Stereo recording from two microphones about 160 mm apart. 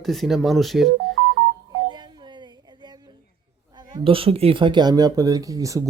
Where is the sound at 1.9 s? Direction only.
25° right (ahead or behind).